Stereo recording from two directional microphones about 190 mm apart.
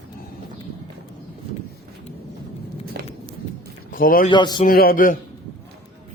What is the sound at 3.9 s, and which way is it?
Speech, 50° left (ahead or behind).